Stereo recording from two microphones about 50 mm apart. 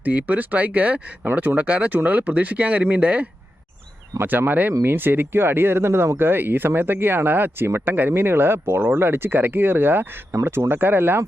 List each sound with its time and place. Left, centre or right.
0.0 s speech: right
1.3 s speech: right
1.5 s speech: right
4.2 s speech: right
10.4 s speech: right